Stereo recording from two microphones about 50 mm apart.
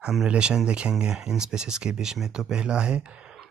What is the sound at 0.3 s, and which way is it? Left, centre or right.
Speech, centre.